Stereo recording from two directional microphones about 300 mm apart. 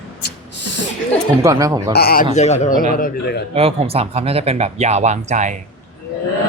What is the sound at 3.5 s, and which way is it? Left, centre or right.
Speech, centre.